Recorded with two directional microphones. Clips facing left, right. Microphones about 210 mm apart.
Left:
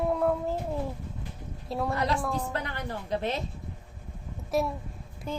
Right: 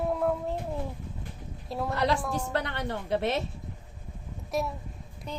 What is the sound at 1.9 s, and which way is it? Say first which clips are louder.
A woman's voice: right 3 dB; 75° right (ahead or behind).